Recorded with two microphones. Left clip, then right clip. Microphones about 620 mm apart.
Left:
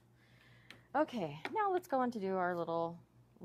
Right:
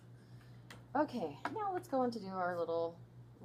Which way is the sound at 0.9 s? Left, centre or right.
Left.